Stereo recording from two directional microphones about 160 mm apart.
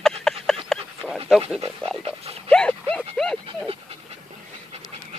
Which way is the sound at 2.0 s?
40° right (ahead or behind).